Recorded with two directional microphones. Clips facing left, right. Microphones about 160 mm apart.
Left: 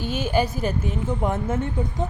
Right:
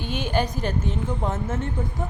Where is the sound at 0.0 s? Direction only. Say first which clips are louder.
Left 2 dB; 45° left (ahead or behind).